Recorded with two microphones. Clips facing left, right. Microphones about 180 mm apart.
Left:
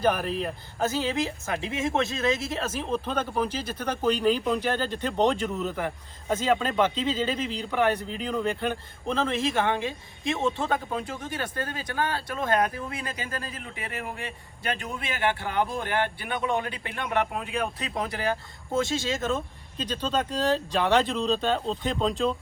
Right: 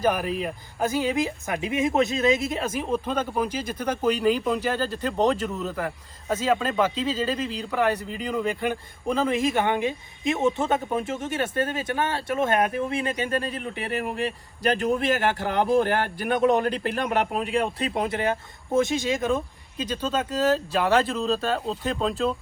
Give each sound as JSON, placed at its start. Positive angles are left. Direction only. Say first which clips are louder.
{"t": 0.0, "sound": "speech", "louder": "right 1 dB", "side_deg": -10}
{"t": 17.3, "sound": "speech", "louder": "right 5 dB", "side_deg": -30}